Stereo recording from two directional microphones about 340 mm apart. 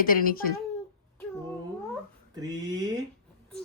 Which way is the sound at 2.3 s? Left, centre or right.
Centre.